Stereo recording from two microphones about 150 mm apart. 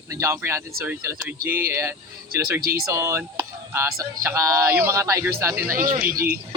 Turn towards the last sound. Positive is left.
turn(degrees=-75)  # may be behind; listen again after turning